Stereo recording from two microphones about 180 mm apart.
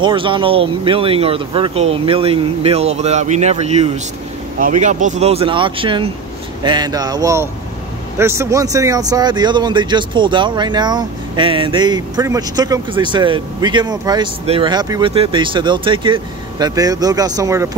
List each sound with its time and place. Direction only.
0.0 s speech: 25° right (ahead or behind)